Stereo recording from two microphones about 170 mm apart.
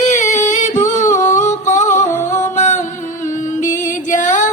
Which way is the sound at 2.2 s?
45° left (ahead or behind).